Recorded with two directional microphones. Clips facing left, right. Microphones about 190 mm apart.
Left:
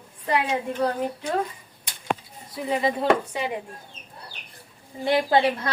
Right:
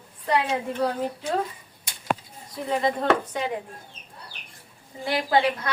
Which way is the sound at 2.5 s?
5° left (ahead or behind).